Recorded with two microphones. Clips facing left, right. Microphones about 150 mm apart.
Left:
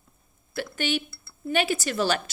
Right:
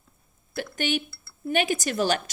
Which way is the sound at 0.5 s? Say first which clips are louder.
Even; 45° right (ahead or behind).